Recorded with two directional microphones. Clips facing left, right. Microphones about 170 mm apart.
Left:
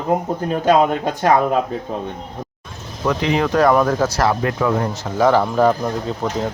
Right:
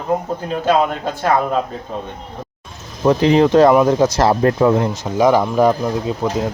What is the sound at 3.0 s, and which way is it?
Speech, 35° right (ahead or behind).